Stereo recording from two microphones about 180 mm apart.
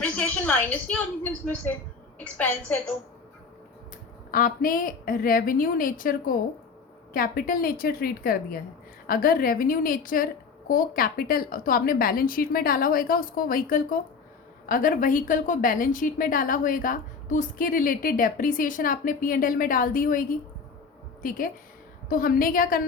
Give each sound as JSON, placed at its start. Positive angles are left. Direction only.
{"t": 0.0, "sound": "a woman's voice", "side_deg": 10}
{"t": 4.3, "sound": "a woman's voice", "side_deg": 50}